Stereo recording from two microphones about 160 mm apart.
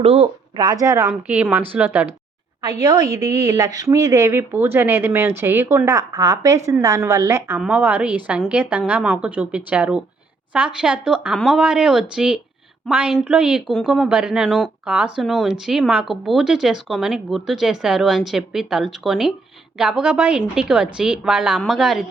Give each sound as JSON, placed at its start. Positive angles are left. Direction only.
{"t": 0.0, "sound": "a woman's voice", "side_deg": -35}
{"t": 3.2, "sound": "a woman's voice", "side_deg": -20}